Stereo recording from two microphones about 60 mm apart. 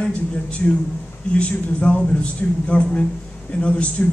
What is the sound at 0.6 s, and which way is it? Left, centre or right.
Speech, centre.